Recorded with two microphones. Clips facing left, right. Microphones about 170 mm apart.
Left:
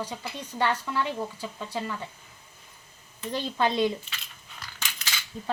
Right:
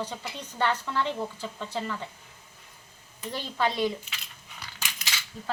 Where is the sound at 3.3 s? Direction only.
20° left (ahead or behind).